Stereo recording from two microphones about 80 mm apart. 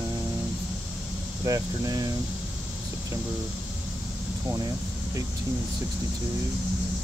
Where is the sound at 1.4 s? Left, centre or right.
Right.